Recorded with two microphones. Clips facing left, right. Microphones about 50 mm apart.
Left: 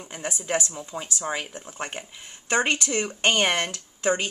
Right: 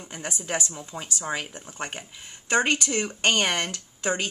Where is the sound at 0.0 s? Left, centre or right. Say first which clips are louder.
Left 2 dB; centre.